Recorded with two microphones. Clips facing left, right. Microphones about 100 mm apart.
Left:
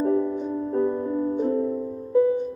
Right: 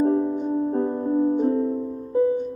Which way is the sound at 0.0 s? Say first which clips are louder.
Right 2 dB; 35° right (ahead or behind).